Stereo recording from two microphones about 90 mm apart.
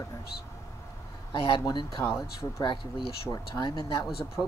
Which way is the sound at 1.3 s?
70° left (ahead or behind).